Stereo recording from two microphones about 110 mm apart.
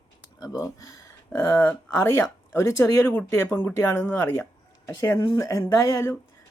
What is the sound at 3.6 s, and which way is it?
Speech, 15° left (ahead or behind).